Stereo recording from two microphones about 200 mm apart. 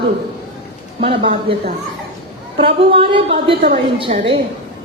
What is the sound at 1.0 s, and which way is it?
Speech, 25° right (ahead or behind).